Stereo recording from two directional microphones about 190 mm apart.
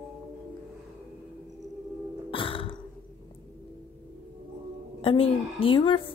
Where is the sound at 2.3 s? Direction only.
25° left (ahead or behind).